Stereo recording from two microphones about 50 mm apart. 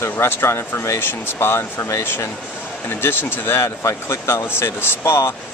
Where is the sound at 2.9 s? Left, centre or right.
Left.